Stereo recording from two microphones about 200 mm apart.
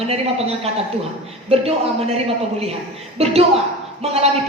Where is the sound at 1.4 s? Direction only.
30° right (ahead or behind).